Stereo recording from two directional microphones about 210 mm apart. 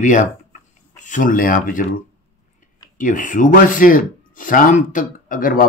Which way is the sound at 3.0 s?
40° left (ahead or behind).